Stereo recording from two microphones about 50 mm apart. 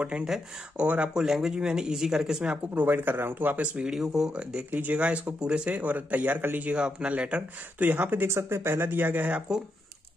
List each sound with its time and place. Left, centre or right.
0.0 s speech: right
1.2 s speech: centre
2.7 s speech: right
3.6 s speech: right
3.9 s speech: centre
4.6 s speech: right
6.6 s speech: right
8.2 s speech: right
9.5 s speech: centre